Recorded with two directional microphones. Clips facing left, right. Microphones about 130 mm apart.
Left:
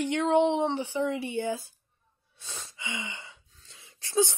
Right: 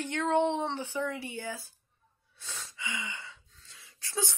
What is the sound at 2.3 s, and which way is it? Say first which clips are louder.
Gasp: even; 20° left (ahead or behind).